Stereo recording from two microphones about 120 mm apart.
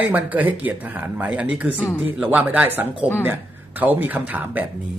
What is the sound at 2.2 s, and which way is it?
Speech, 15° right (ahead or behind).